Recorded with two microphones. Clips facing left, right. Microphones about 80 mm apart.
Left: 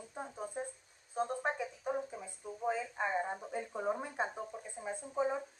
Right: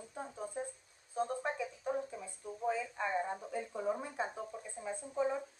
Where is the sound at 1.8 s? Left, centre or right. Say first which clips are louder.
Even; centre.